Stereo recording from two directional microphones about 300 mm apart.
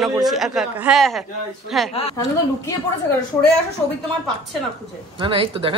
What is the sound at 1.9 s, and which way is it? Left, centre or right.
Speech, centre.